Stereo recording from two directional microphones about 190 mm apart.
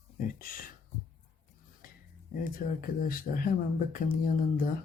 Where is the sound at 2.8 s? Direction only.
50° left (ahead or behind).